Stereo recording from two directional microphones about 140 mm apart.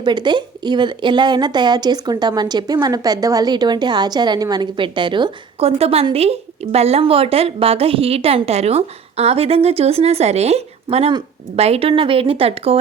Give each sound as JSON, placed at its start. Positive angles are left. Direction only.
{"t": 0.0, "sound": "a woman's voice", "side_deg": -30}